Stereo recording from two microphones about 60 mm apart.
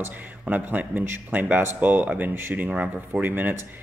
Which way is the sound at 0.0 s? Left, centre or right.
Right.